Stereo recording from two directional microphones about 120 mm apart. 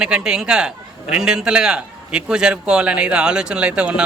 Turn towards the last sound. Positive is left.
turn(degrees=-10)  # may be behind; listen again after turning